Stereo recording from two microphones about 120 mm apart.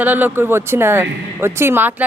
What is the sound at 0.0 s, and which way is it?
Speech, 15° right (ahead or behind).